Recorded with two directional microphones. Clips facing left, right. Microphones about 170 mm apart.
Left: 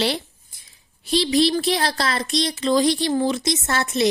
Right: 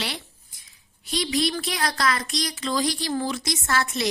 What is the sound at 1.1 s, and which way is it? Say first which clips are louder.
Speech: left 7 dB; 30° left (ahead or behind).